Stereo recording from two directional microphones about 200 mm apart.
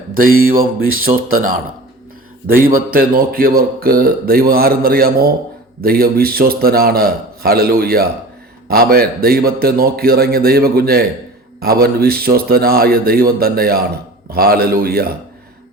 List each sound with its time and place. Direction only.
0.2 s a man's voice: 45° right (ahead or behind)
2.6 s a man's voice: 45° right (ahead or behind)